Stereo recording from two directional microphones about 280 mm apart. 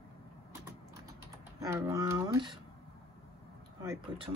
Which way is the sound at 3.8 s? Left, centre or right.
Centre.